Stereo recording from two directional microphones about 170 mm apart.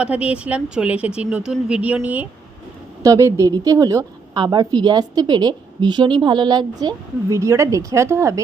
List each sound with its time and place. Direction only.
0.0 s a woman's voice: 5° right (ahead or behind)